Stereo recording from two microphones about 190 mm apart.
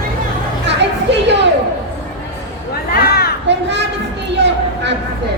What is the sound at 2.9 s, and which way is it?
Children playing, 55° left (ahead or behind).